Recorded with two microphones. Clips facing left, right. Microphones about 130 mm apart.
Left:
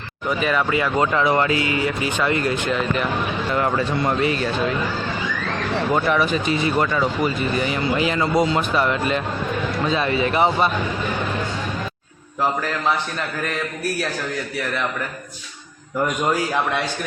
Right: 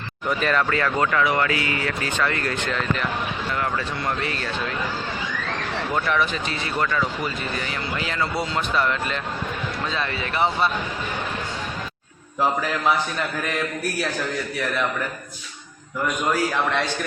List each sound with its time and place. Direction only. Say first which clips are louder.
0.3 s speech: left 1 dB; 5° left (ahead or behind)
3.5 s speech: left 7 dB; 25° left (ahead or behind)
5.9 s speech: left 4 dB; 10° left (ahead or behind)